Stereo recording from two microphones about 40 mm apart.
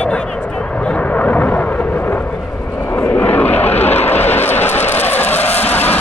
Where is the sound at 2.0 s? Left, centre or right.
Left.